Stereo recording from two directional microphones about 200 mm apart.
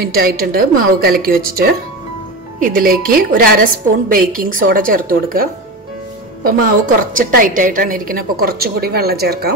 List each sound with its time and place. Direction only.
0.0 s a woman's voice: 50° right (ahead or behind)